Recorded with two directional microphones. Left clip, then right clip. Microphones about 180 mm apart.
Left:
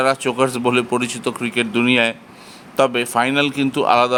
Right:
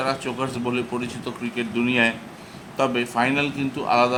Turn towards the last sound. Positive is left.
turn(degrees=45)  # may be behind; listen again after turning